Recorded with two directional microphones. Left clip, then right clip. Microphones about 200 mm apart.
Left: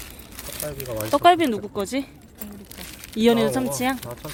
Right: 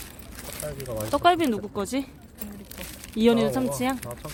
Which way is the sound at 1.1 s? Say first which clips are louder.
Left 4 dB; 10° left (ahead or behind).